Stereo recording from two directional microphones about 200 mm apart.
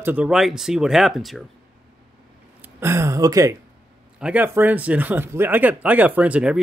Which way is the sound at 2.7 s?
15° right (ahead or behind).